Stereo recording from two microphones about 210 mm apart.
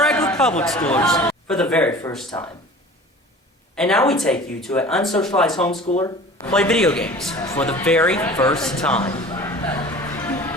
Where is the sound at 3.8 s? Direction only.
5° left (ahead or behind).